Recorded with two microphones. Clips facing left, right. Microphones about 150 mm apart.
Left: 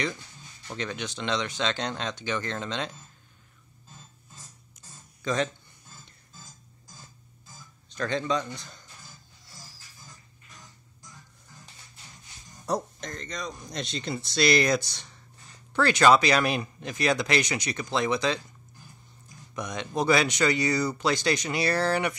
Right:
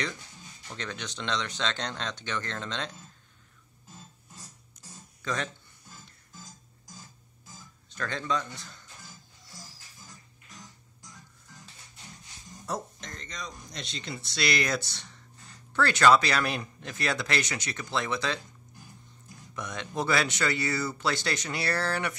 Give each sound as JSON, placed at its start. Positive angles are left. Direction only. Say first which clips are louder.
{"t": 0.7, "sound": "speech", "louder": "left 4 dB", "side_deg": 10}
{"t": 5.2, "sound": "speech", "louder": "left 6 dB", "side_deg": 20}
{"t": 7.9, "sound": "speech", "louder": "left 4 dB", "side_deg": 20}
{"t": 12.6, "sound": "speech", "louder": "left 6 dB", "side_deg": 40}
{"t": 14.7, "sound": "speech", "louder": "left 6 dB", "side_deg": 15}
{"t": 19.5, "sound": "speech", "louder": "left 3 dB", "side_deg": 15}